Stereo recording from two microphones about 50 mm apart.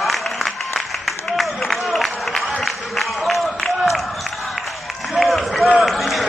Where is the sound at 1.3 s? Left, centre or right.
Centre.